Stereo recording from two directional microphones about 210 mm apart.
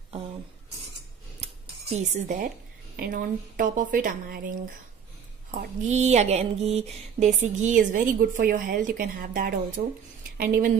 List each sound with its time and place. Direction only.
1.4 s cutlery: 35° right (ahead or behind)
3.0 s a woman's voice: 45° right (ahead or behind)